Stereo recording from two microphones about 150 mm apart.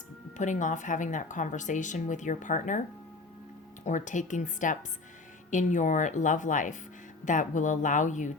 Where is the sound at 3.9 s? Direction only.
55° left (ahead or behind).